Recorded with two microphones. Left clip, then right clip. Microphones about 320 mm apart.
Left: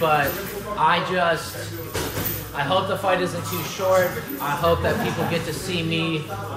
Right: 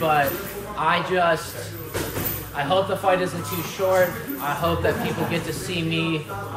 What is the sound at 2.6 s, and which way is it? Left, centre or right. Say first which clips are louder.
Speech: even; centre.